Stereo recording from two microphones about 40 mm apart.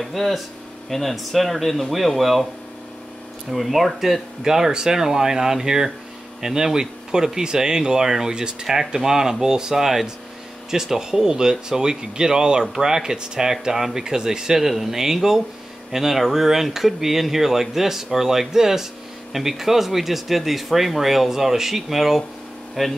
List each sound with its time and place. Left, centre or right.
0.0 s speech: centre
3.5 s speech: centre